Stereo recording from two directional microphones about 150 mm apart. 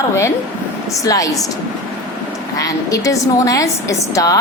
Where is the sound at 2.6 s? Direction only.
20° left (ahead or behind).